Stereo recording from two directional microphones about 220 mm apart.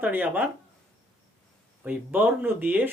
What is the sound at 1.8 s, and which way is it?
Speech, 10° right (ahead or behind).